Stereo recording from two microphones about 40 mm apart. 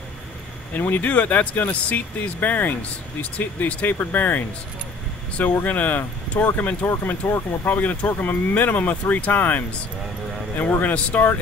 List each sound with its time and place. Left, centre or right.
0.7 s speech: left
5.7 s speech: left
7.1 s speech: left
7.8 s speech: left